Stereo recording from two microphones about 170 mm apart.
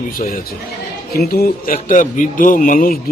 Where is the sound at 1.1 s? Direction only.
65° left (ahead or behind).